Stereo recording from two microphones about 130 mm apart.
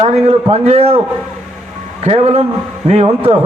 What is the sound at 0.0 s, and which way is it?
A man's voice, 50° right (ahead or behind).